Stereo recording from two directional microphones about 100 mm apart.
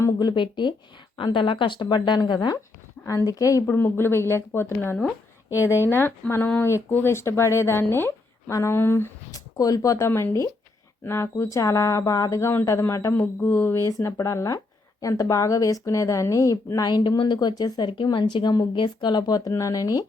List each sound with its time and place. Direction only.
0.2 s speech: 50° left (ahead or behind)
3.1 s a woman's voice: 35° left (ahead or behind)
3.7 s speech: 20° left (ahead or behind)
9.3 s a woman's voice: 35° left (ahead or behind); by 13.8 s 20° left (ahead or behind)
13.8 s a woman's voice: 30° left (ahead or behind)
17.9 s speech: 60° left (ahead or behind); by 20.1 s 40° left (ahead or behind)